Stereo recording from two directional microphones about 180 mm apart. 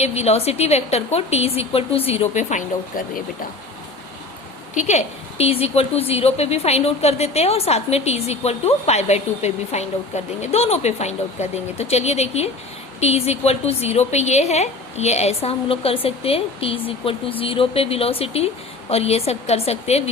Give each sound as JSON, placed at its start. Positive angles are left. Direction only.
{"t": 0.0, "sound": "a woman's voice", "side_deg": 35}
{"t": 4.7, "sound": "a woman's voice", "side_deg": 40}